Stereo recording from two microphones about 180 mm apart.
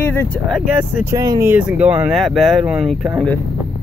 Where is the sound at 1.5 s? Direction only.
5° right (ahead or behind).